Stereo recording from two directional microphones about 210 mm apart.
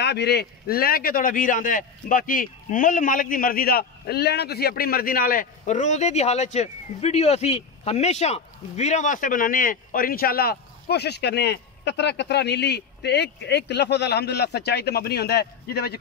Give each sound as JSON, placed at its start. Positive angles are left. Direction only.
{"t": 0.0, "sound": "a man's voice", "side_deg": 50}